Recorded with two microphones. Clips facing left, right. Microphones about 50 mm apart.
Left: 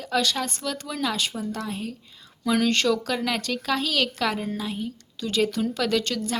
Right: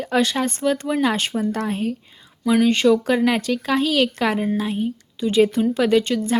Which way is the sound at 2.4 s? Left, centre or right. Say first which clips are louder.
Right 6 dB; centre.